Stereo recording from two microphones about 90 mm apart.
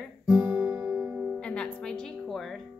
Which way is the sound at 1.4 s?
10° left (ahead or behind).